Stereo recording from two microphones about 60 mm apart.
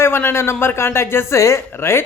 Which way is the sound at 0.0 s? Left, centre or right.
Left.